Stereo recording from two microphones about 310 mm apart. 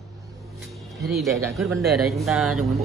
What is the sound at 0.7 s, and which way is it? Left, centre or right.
Speech, centre.